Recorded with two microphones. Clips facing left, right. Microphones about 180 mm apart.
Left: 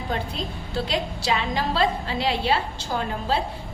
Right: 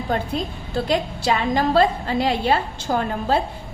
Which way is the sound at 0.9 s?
50° right (ahead or behind).